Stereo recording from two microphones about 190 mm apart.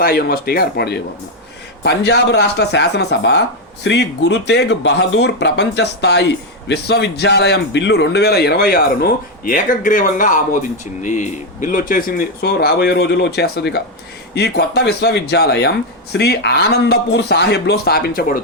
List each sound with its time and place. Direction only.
0.0 s speech: 50° left (ahead or behind)